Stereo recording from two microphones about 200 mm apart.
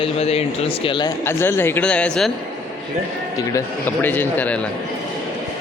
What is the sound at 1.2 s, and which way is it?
Speech, 10° left (ahead or behind).